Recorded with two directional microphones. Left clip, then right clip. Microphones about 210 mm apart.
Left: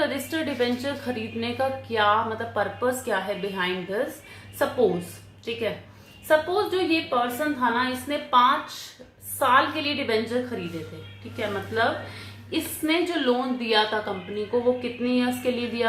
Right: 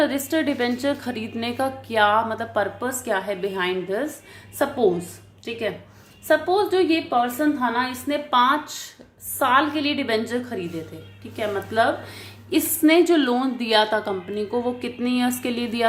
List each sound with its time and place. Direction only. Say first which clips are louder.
0.0 s a woman's voice: right 5 dB; 40° right (ahead or behind)
11.3 s a woman's voice: right 4 dB; 50° right (ahead or behind)